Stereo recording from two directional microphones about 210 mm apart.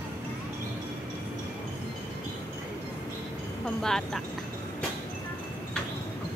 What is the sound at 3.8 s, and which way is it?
Speech, 5° left (ahead or behind).